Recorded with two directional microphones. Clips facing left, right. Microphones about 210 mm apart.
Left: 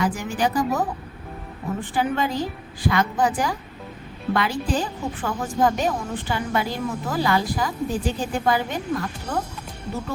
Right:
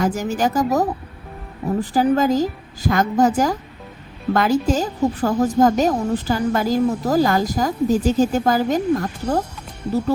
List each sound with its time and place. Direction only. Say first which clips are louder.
0.0 s a woman's voice: right 4 dB; 40° right (ahead or behind)